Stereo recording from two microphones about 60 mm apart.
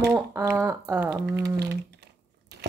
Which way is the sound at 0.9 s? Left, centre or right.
Right.